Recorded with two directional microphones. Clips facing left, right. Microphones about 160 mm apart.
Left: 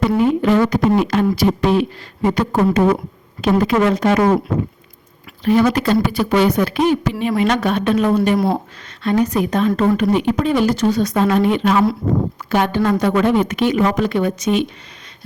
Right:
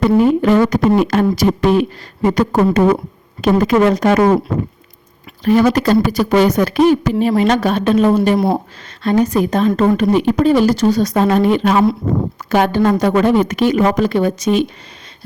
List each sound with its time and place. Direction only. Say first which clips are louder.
0.2 s speech: right 1 dB; 45° right (ahead or behind)
5.5 s a woman's voice: right 2 dB; 40° right (ahead or behind)